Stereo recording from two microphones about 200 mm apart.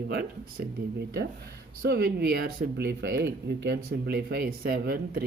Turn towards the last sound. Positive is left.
turn(degrees=-50)  # may be behind; listen again after turning